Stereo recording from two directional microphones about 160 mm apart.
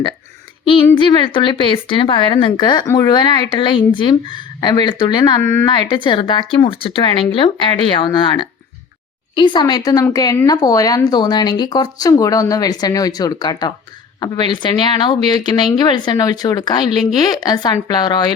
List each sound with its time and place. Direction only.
0.6 s a woman's voice: 30° left (ahead or behind)
5.4 s speech: 15° left (ahead or behind)
5.6 s a woman's voice: 30° left (ahead or behind)